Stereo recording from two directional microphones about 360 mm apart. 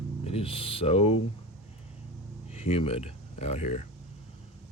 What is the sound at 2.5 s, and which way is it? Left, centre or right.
Speech, centre.